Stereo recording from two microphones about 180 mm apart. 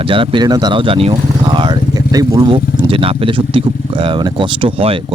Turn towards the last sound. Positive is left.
turn(degrees=-30)  # may be behind; listen again after turning